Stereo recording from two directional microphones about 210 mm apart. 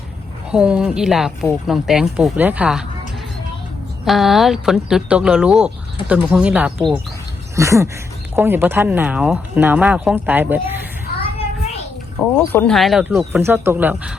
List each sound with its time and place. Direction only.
0.5 s speech: 5° right (ahead or behind)
4.0 s speech: centre (ahead or behind)
12.2 s speech: 5° left (ahead or behind)